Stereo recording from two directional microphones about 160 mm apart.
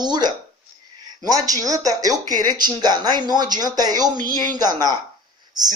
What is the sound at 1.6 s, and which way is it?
Speech, 20° right (ahead or behind).